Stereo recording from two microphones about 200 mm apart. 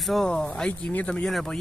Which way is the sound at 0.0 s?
Centre (ahead or behind).